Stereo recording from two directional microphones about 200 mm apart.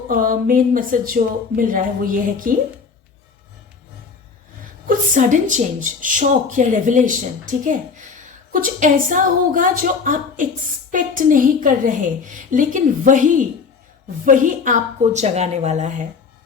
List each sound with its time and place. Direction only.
0.1 s a woman's voice: 45° right (ahead or behind)
4.9 s speech: 40° right (ahead or behind)